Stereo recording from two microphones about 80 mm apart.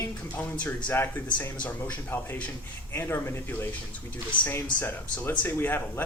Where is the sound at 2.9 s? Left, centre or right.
Left.